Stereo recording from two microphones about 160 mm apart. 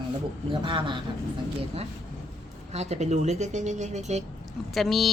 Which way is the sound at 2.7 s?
45° right (ahead or behind).